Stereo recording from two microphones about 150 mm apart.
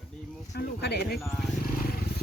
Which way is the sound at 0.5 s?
90° left.